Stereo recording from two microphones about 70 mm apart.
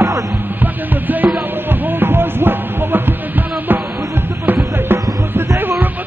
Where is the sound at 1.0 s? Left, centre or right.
Right.